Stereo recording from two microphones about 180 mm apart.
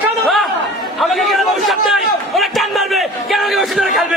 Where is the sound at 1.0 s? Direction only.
Centre (ahead or behind).